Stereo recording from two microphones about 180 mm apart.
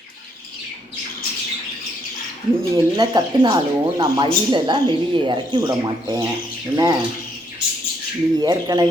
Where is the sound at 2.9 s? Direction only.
25° right (ahead or behind).